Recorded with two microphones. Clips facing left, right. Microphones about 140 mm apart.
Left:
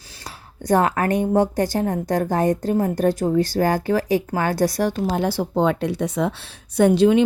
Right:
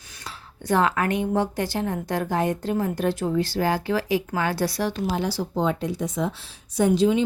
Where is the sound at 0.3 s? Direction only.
40° left (ahead or behind).